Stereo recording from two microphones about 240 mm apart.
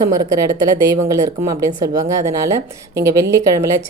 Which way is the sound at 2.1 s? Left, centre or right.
Right.